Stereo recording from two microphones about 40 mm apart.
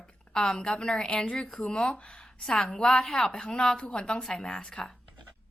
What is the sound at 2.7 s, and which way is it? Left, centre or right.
Speech, left.